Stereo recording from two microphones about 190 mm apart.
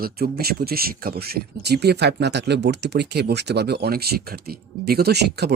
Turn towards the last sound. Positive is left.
turn(degrees=-60)  # may be behind; listen again after turning